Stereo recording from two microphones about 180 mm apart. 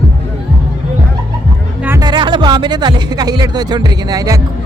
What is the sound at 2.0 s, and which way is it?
Speech, 25° right (ahead or behind).